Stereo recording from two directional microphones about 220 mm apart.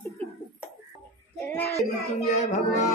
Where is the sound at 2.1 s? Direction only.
30° left (ahead or behind).